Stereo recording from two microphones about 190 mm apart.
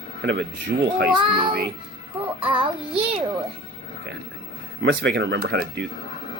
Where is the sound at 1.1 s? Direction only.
25° right (ahead or behind).